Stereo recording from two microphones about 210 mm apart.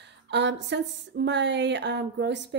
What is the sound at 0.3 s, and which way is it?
Speech, 55° right (ahead or behind).